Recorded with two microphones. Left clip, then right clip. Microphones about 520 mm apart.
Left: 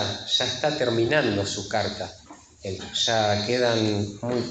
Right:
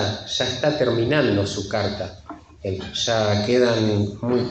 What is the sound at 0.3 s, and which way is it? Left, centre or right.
A man's voice, right.